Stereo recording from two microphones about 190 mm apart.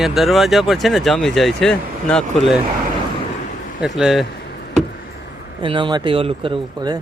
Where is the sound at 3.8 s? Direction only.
5° right (ahead or behind).